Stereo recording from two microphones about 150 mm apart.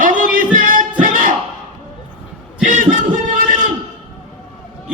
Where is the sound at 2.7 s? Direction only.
60° right (ahead or behind).